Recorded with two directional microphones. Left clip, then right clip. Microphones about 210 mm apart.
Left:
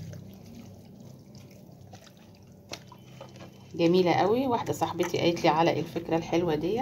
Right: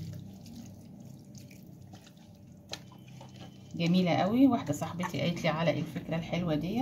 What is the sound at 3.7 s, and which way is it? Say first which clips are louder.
Speech: left 7 dB; 40° left (ahead or behind).